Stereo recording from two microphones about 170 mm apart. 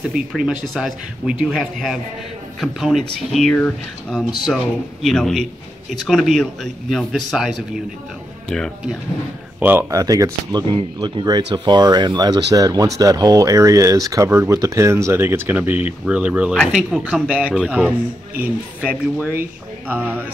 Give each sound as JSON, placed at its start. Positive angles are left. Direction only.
{"t": 0.1, "sound": "a man's voice", "side_deg": -5}
{"t": 9.6, "sound": "speech", "side_deg": -10}
{"t": 16.5, "sound": "a man's voice", "side_deg": 5}
{"t": 17.0, "sound": "speech", "side_deg": -5}